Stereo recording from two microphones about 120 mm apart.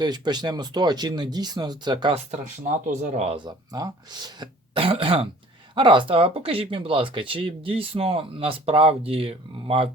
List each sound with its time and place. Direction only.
0.0 s speech: 35° right (ahead or behind)
2.1 s speech: 80° right
3.3 s speech: 35° right (ahead or behind)
4.8 s speech: 50° right (ahead or behind)